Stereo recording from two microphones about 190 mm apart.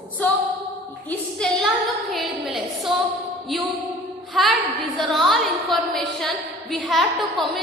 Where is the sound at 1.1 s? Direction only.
5° left (ahead or behind).